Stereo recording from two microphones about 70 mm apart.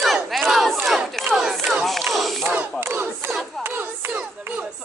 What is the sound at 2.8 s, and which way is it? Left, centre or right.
Battle cry, right.